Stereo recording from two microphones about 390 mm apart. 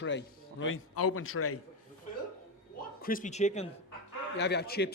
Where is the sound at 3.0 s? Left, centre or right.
Left.